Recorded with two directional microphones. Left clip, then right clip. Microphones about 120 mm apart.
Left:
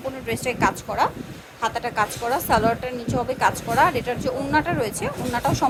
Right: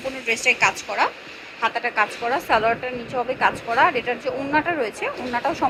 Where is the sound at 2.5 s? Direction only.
35° left (ahead or behind).